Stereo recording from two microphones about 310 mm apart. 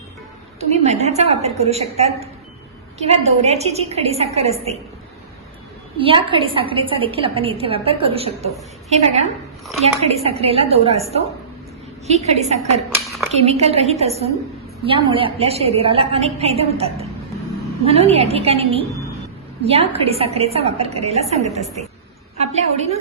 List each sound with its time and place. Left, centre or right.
0.6 s a woman's voice: right
6.0 s a woman's voice: centre
13.1 s a sound: centre
13.3 s a woman's voice: centre